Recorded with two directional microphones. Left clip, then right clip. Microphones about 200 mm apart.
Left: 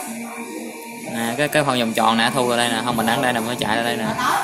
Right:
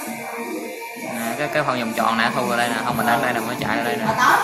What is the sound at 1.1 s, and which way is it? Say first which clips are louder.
A man's voice: left 3 dB; 40° left (ahead or behind).